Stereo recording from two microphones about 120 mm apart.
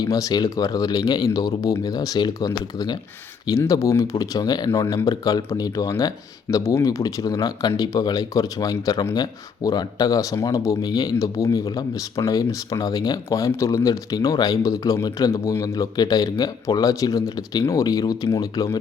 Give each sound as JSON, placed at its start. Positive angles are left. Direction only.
{"t": 0.0, "sound": "speech", "side_deg": 30}